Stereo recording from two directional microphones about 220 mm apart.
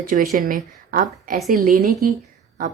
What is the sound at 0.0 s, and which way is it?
A woman's voice, 40° right (ahead or behind).